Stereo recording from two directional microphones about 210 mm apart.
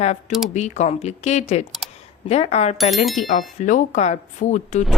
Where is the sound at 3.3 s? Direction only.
35° left (ahead or behind).